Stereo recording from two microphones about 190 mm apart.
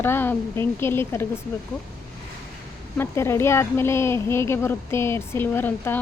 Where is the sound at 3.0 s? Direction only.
15° left (ahead or behind).